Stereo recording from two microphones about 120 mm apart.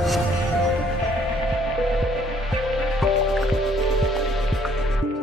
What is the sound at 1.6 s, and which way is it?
Music, centre (ahead or behind).